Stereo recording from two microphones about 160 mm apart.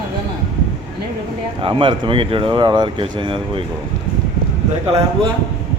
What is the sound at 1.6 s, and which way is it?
Speech, 30° right (ahead or behind).